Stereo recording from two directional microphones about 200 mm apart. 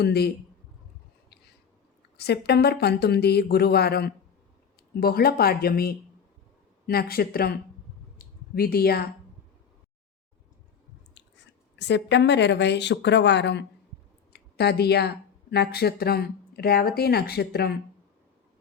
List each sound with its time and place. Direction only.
0.0 s speech: 55° left (ahead or behind)
2.1 s speech: 55° left (ahead or behind)
8.2 s a sound: 50° left (ahead or behind)
11.8 s speech: 60° left (ahead or behind)